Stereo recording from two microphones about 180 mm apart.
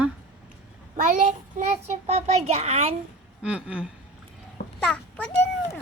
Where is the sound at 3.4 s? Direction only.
5° right (ahead or behind).